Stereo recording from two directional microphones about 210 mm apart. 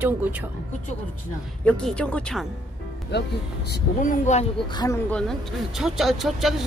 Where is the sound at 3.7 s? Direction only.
35° left (ahead or behind).